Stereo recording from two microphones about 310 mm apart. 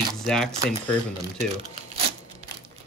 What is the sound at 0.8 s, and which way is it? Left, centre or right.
Speech, right.